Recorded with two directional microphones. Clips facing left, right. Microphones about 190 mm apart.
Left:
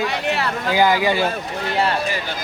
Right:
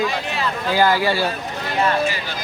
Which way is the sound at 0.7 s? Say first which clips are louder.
Left 1 dB; 15° left (ahead or behind).